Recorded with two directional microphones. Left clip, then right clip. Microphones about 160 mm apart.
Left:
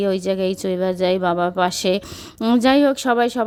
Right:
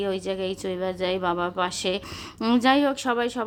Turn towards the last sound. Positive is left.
turn(degrees=35)  # may be behind; listen again after turning